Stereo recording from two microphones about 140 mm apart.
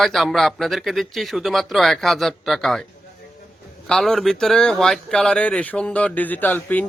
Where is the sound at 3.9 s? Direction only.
5° left (ahead or behind).